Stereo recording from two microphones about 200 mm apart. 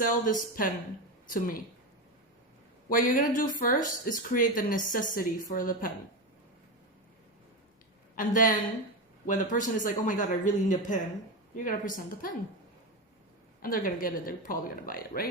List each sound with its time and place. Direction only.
0.3 s speech: 40° left (ahead or behind)
2.9 s speech: 40° left (ahead or behind)
8.1 s a man's voice: 40° left (ahead or behind)
13.6 s speech: 45° left (ahead or behind)